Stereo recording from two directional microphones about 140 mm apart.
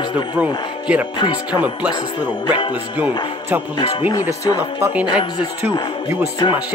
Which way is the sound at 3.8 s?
30° left (ahead or behind).